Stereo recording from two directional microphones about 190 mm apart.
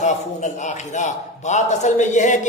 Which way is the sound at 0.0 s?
40° left (ahead or behind).